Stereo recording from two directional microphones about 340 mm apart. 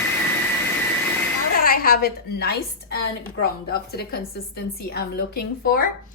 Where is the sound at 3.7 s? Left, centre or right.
Left.